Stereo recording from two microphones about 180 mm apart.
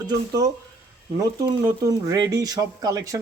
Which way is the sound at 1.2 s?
20° right (ahead or behind).